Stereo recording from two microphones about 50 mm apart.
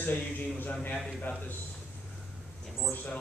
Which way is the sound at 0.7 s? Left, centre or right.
Left.